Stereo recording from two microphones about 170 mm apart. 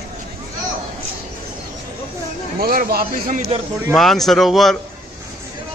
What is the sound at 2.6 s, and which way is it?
Speech, 60° right (ahead or behind).